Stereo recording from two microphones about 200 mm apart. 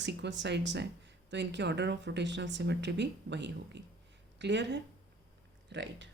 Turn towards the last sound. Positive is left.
turn(degrees=-60)  # may be behind; listen again after turning